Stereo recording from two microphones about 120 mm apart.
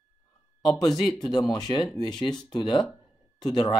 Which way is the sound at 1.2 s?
35° left (ahead or behind).